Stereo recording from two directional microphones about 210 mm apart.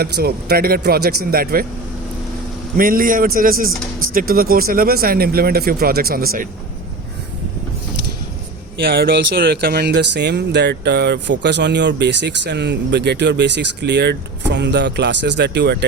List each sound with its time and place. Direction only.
0.0 s speech: 50° right (ahead or behind)
2.7 s speech: 40° right (ahead or behind)
8.8 s speech: 45° right (ahead or behind)